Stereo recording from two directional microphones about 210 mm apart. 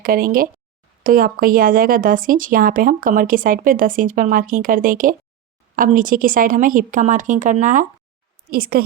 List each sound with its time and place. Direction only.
0.0 s speech: 45° right (ahead or behind)